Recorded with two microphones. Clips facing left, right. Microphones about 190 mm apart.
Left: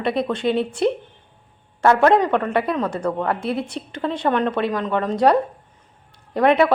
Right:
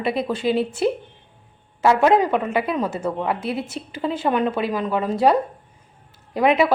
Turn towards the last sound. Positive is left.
turn(degrees=0)  # may be behind; listen again after turning